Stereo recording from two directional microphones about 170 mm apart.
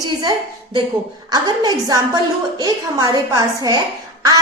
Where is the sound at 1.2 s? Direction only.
20° right (ahead or behind).